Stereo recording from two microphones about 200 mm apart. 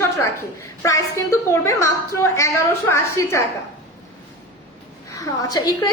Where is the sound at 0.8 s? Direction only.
15° left (ahead or behind).